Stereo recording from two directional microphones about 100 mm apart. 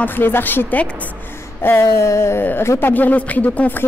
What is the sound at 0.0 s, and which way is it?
A woman's voice, 20° left (ahead or behind).